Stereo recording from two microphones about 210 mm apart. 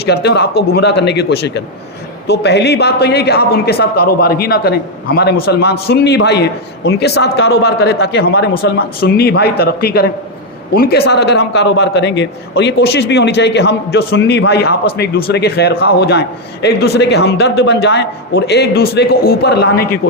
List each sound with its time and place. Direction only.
0.0 s a man's voice: 50° left (ahead or behind)